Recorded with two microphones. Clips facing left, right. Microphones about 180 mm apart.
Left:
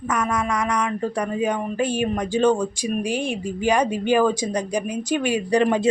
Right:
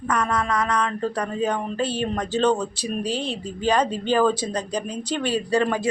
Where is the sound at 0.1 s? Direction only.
10° left (ahead or behind).